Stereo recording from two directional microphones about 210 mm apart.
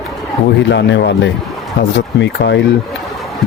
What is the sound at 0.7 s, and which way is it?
Speech, 55° left (ahead or behind).